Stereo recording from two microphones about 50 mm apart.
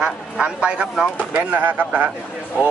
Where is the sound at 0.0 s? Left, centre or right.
Right.